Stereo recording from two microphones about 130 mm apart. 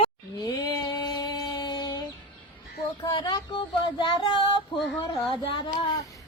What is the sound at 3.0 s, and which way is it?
Speech, 35° left (ahead or behind).